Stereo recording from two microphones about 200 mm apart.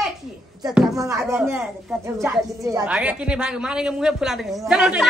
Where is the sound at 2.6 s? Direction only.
15° right (ahead or behind).